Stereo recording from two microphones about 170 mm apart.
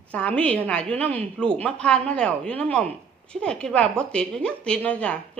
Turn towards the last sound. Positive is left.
turn(degrees=5)  # may be behind; listen again after turning